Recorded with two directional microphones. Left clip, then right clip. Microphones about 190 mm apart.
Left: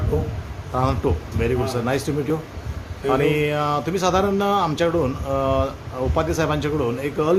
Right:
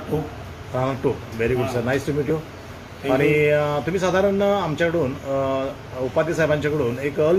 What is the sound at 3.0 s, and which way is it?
A man's voice, 15° left (ahead or behind).